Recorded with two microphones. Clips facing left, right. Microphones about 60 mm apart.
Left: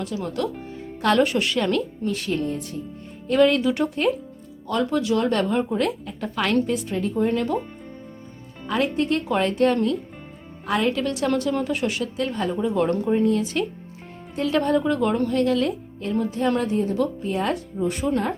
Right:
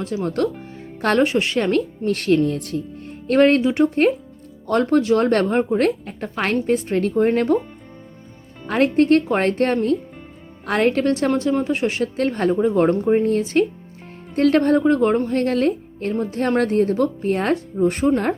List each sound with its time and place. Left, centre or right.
0.0 s a woman's voice: right
2.0 s speech: right
3.2 s speech: right
3.6 s a woman's voice: right
4.6 s speech: right
7.2 s speech: right
8.6 s speech: right
11.3 s a woman's voice: right
12.0 s speech: right
14.3 s speech: right
16.6 s speech: right